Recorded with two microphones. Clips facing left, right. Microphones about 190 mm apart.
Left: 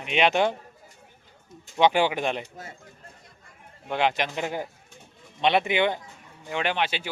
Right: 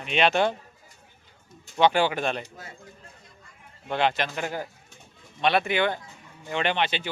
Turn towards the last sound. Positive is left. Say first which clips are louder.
# right 1 dB
turn(degrees=10)  # may be behind; listen again after turning